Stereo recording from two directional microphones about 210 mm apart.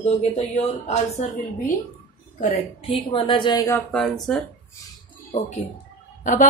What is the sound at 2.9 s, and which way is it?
Speech, 25° left (ahead or behind).